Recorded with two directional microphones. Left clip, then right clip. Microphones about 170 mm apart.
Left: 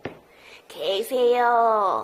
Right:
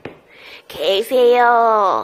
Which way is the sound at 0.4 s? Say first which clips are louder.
Right 8 dB; 25° right (ahead or behind).